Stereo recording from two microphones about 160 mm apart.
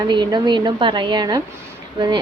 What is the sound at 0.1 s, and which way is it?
A woman's voice, 30° right (ahead or behind).